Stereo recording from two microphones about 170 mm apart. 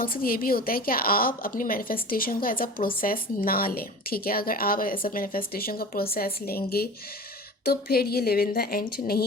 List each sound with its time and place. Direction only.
0.0 s a woman's voice: 55° left (ahead or behind)